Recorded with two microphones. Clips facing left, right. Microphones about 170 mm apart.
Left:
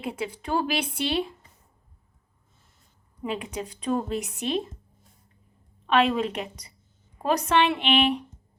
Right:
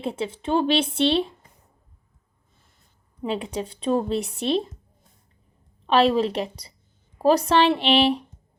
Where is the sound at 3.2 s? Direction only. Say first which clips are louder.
Right 4 dB; 30° right (ahead or behind).